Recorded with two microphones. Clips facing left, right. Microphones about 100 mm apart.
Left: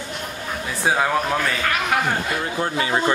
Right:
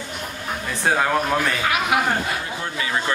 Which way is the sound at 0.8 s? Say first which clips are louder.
Even; centre (ahead or behind).